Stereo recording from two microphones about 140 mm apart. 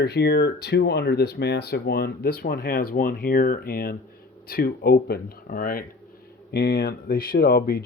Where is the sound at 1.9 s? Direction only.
90° left.